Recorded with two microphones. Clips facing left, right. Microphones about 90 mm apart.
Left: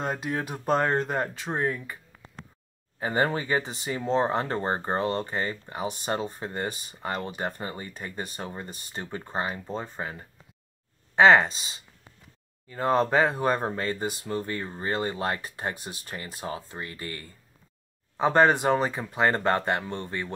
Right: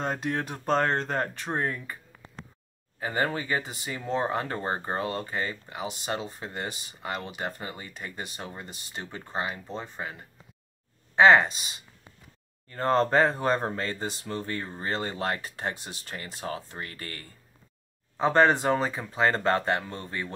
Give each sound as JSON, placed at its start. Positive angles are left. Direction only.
{"t": 0.0, "sound": "speech", "side_deg": 5}
{"t": 3.0, "sound": "speech", "side_deg": 25}
{"t": 9.0, "sound": "speech", "side_deg": 20}
{"t": 9.3, "sound": "speech", "side_deg": 35}
{"t": 12.6, "sound": "speech", "side_deg": 10}